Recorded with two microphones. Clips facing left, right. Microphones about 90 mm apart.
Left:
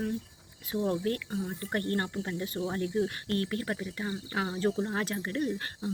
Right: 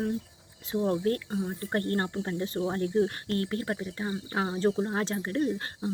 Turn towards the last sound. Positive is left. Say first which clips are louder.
# right 3 dB
turn(degrees=-25)  # may be behind; listen again after turning